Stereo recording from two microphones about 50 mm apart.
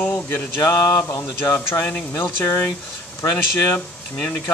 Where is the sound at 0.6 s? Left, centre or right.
Left.